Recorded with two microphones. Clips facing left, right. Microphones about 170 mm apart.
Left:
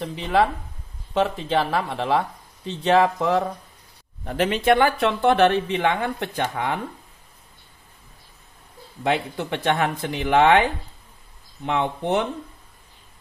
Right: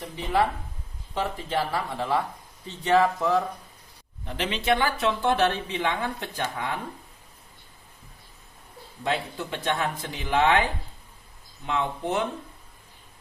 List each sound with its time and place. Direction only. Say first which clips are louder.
0.0 s speech: left 4 dB; 75° left (ahead or behind)
4.2 s speech: left 8 dB; 50° left (ahead or behind); by 6.7 s 65° left (ahead or behind)
9.0 s speech: left 5 dB; 65° left (ahead or behind)
11.6 s speech: left 4 dB; 65° left (ahead or behind)